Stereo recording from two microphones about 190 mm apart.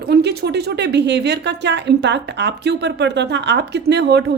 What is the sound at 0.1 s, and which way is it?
A woman's voice, 60° right (ahead or behind).